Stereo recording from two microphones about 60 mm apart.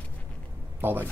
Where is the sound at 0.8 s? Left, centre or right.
Right.